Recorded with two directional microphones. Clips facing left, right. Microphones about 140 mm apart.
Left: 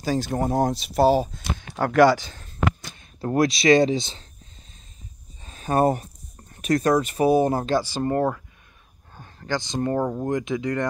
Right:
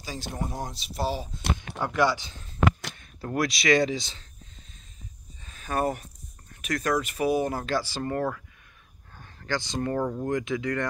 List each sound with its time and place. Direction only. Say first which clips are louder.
0.0 s speech: left 10 dB; 50° left (ahead or behind)
1.8 s speech: left 9 dB; 85° left
2.1 s speech: left 6 dB; 45° left (ahead or behind)
3.3 s speech: left 6 dB; 25° left (ahead or behind)
5.4 s a sound: left 7 dB; 30° left (ahead or behind)
6.5 s speech: left 7 dB; 30° left (ahead or behind)